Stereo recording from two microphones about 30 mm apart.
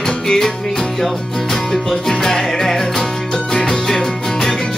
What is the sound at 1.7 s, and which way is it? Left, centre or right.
Music, centre.